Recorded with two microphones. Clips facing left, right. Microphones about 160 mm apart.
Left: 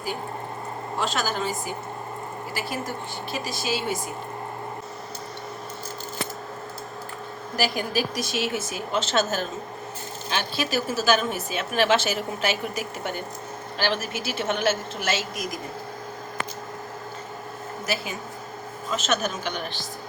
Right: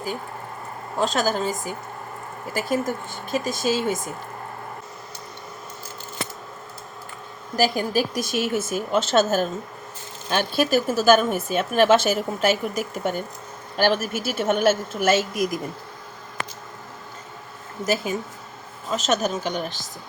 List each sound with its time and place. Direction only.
0.9 s speech: 40° right (ahead or behind)
2.6 s speech: 45° right (ahead or behind)
7.5 s speech: 45° right (ahead or behind)
17.8 s speech: 45° right (ahead or behind)